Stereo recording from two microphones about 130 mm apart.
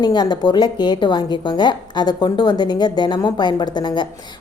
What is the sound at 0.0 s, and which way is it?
Speech, 35° left (ahead or behind).